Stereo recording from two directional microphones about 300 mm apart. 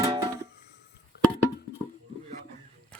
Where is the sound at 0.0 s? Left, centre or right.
Centre.